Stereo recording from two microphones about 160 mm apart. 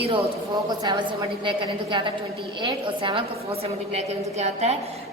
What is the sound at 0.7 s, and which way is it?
A woman's voice, 25° right (ahead or behind).